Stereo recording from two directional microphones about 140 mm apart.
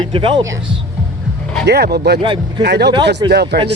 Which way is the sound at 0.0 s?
40° right (ahead or behind).